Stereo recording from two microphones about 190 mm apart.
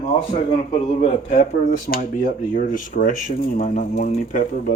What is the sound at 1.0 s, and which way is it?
Speech, 40° left (ahead or behind).